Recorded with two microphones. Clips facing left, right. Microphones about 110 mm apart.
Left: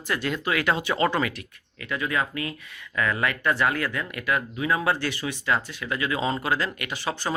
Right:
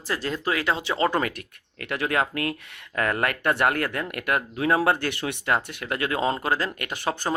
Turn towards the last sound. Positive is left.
turn(degrees=-50)  # may be behind; listen again after turning